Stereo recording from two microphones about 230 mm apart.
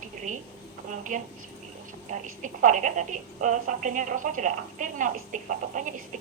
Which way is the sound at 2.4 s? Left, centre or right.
Right.